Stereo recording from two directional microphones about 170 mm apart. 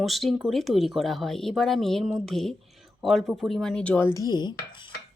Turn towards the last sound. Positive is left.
turn(degrees=25)  # may be behind; listen again after turning